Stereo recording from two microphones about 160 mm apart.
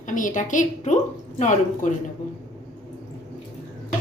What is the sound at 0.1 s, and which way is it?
A woman's voice, 55° left (ahead or behind).